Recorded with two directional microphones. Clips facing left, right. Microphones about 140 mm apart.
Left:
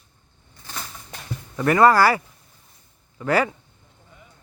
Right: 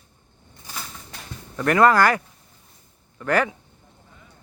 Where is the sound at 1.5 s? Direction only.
5° left (ahead or behind).